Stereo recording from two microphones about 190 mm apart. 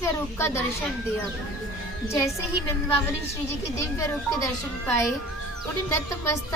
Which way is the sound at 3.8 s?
15° left (ahead or behind).